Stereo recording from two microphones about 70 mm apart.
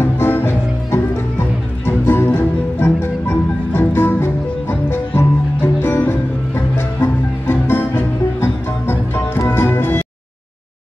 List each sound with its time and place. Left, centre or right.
0.0 s music: left